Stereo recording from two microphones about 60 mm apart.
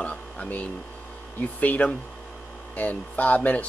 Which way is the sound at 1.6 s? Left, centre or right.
Left.